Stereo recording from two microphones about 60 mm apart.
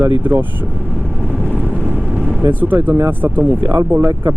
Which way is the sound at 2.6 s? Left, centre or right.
Right.